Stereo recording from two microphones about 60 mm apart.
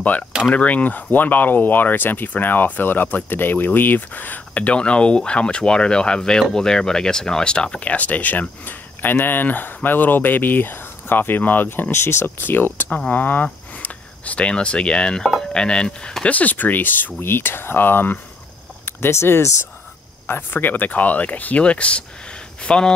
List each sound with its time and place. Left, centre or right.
0.5 s speech: left
11.9 s speech: left; by 16.3 s centre
16.3 s speech: left
18.9 s speech: left; by 22.9 s centre